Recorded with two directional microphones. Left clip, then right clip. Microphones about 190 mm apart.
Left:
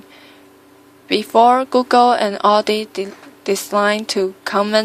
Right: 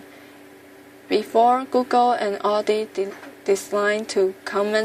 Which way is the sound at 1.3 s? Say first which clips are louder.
Left 6 dB; 40° left (ahead or behind).